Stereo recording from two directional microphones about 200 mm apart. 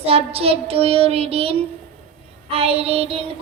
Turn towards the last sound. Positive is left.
turn(degrees=-30)  # may be behind; listen again after turning